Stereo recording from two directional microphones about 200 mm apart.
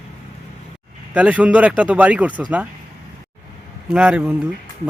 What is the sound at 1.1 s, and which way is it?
Speech, 5° right (ahead or behind).